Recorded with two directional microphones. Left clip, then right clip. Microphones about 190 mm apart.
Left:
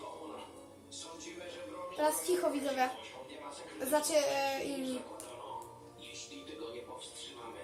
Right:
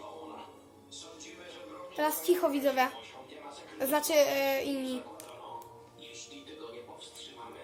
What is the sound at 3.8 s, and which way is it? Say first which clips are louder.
Speech: right 4 dB; 55° right (ahead or behind).